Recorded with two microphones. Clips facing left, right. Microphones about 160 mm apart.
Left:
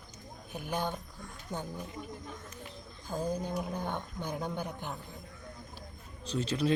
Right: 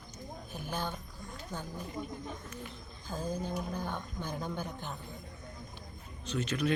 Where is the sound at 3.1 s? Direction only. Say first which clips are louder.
Left 2 dB; 15° left (ahead or behind).